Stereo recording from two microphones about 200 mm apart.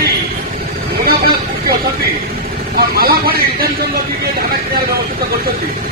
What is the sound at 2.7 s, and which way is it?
Speech, 50° right (ahead or behind).